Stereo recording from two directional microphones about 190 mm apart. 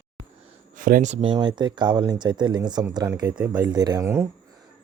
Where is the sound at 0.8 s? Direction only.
45° right (ahead or behind).